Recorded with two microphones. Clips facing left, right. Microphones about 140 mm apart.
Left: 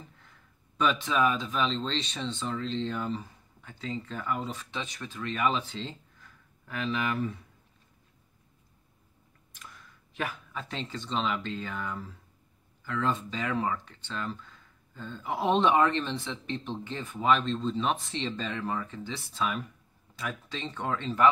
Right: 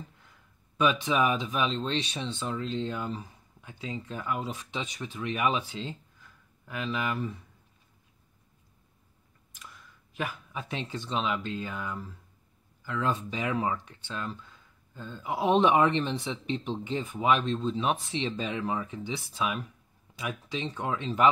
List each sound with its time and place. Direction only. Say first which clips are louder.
0.7 s speech: right 1 dB; 10° right (ahead or behind)
10.1 s a sound: even; 5° right (ahead or behind)
10.6 s speech: right 2 dB; 15° right (ahead or behind)